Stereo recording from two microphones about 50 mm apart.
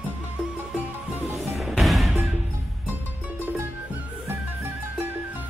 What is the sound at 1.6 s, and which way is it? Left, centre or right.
Music, centre.